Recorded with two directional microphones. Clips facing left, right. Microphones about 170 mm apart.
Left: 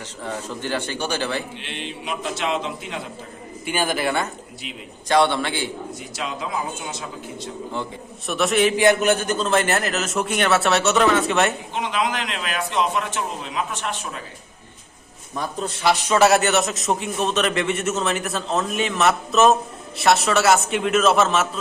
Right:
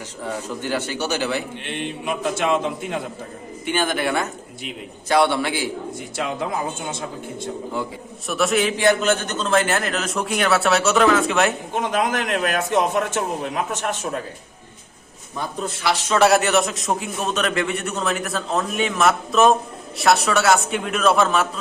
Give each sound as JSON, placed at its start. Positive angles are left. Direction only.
{"t": 0.2, "sound": "a man's voice", "side_deg": -10}
{"t": 1.6, "sound": "a man's voice", "side_deg": -55}
{"t": 3.7, "sound": "a man's voice", "side_deg": 10}
{"t": 6.0, "sound": "a man's voice", "side_deg": -55}
{"t": 8.3, "sound": "a man's voice", "side_deg": 0}
{"t": 8.8, "sound": "a man's voice", "side_deg": 15}
{"t": 11.7, "sound": "a man's voice", "side_deg": -50}
{"t": 16.0, "sound": "a man's voice", "side_deg": 5}